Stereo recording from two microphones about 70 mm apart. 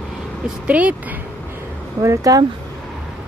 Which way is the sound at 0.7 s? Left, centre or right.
Centre.